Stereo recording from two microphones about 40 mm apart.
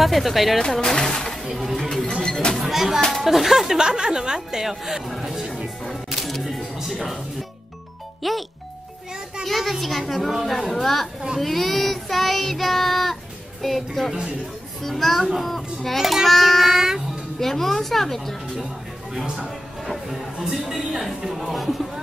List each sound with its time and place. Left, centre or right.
0.0 s a child's voice: centre
0.6 s speech: centre
1.4 s a child's voice: centre
3.7 s a woman's voice: centre
4.6 s speech: centre
6.0 s music: centre
6.8 s speech: centre
8.2 s a child's voice: centre
11.3 s child singing: centre
14.8 s a child's voice: centre
20.1 s a child's voice: centre